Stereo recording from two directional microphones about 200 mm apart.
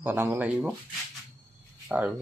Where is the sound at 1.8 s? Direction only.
10° right (ahead or behind).